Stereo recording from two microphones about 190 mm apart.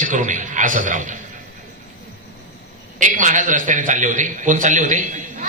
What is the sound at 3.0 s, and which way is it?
A man's voice, 45° right (ahead or behind).